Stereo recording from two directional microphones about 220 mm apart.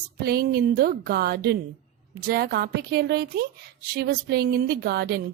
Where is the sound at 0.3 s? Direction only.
45° right (ahead or behind).